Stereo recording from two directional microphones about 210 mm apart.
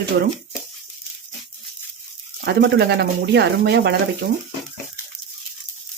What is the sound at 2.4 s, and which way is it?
Speech, 50° right (ahead or behind).